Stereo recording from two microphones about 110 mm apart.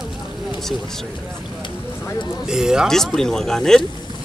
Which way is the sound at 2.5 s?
5° right (ahead or behind).